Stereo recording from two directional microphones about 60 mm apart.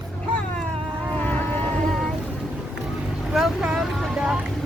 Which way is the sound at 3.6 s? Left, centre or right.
Centre.